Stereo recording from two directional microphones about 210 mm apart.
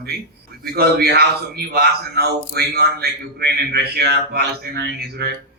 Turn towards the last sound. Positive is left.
turn(degrees=-50)  # may be behind; listen again after turning